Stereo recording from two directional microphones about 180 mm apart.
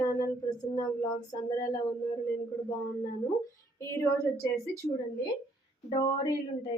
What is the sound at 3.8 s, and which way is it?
Speech, 15° left (ahead or behind).